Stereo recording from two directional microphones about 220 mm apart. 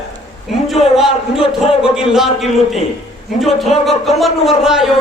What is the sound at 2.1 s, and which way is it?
A man's voice, centre (ahead or behind).